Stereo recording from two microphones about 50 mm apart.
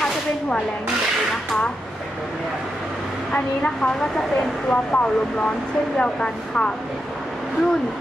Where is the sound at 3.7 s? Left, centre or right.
Centre.